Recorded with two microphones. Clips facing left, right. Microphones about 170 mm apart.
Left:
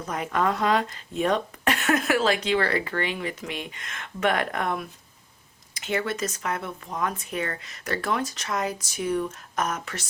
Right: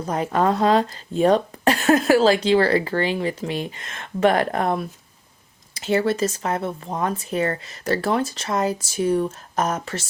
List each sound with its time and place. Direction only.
0.0 s speech: 30° right (ahead or behind)